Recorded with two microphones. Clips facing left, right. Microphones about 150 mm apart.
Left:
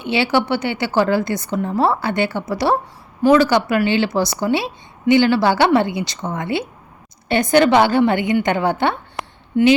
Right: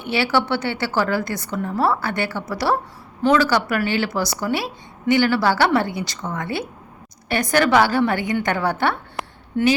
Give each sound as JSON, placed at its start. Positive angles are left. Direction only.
{"t": 0.0, "sound": "a woman's voice", "side_deg": 20}